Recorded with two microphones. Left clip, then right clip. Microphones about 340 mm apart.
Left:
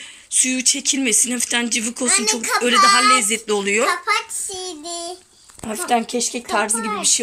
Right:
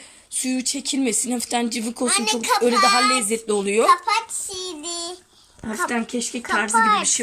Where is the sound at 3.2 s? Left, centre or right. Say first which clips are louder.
Left 2 dB; centre.